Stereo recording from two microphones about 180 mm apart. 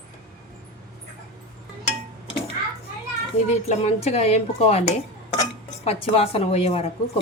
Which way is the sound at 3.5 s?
40° left (ahead or behind).